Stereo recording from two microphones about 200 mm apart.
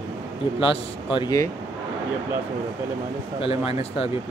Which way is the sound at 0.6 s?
25° left (ahead or behind).